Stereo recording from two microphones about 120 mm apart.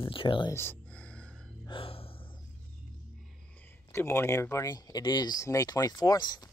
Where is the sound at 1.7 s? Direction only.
50° left (ahead or behind).